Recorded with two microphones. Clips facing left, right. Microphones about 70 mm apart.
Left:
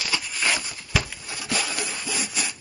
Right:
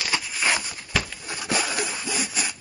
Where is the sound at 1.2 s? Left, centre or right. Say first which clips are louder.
Right 2 dB; right.